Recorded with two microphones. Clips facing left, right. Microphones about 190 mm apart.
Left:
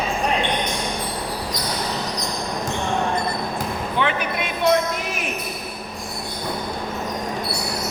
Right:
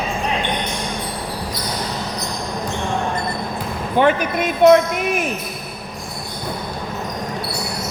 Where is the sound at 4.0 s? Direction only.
45° right (ahead or behind).